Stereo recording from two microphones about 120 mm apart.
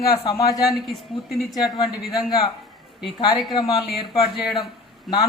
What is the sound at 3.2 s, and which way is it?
Speech, 35° left (ahead or behind).